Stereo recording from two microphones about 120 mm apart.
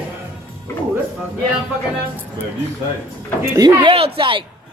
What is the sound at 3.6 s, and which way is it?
Speech, 35° right (ahead or behind).